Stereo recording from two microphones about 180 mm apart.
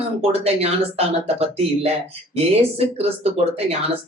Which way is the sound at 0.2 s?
35° right (ahead or behind).